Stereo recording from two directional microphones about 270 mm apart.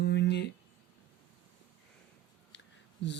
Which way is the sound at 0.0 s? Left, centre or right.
Left.